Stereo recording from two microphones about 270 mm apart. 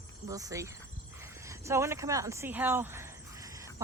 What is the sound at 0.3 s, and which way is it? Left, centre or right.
Speech, centre.